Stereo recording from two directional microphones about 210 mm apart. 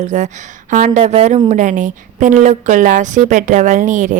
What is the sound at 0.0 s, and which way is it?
A woman's voice, 35° right (ahead or behind).